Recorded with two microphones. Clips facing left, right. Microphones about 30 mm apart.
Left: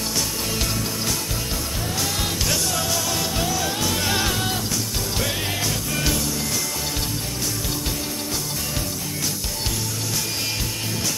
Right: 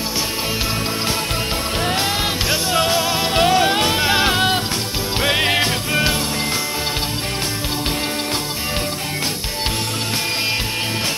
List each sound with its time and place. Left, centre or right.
2.5 s music: right